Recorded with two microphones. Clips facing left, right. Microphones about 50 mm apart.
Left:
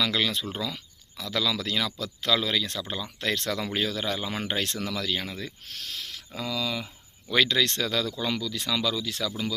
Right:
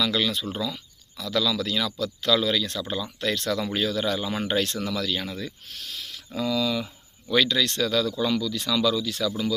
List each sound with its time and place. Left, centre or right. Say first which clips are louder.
0.0 s speech: right 2 dB; left
7.4 s speech: right 1 dB; left
9.0 s speech: right 4 dB; left